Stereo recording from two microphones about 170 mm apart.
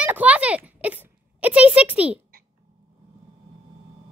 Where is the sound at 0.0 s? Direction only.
10° right (ahead or behind).